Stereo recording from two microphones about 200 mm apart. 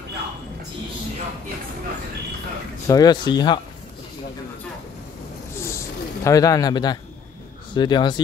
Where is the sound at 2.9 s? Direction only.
20° left (ahead or behind).